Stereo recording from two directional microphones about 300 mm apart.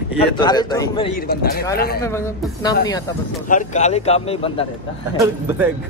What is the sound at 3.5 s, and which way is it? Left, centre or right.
A man's voice, left.